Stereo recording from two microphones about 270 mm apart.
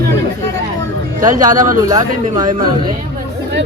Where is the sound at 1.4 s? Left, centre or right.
Centre.